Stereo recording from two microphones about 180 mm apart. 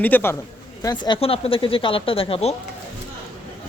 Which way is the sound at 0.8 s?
25° left (ahead or behind).